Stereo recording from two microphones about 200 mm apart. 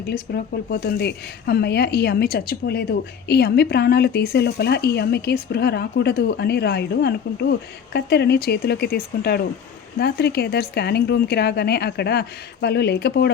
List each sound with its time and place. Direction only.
0.3 s speech: 55° left (ahead or behind)